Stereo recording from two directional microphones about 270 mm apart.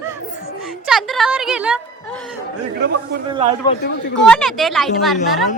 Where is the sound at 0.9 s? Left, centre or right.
Centre.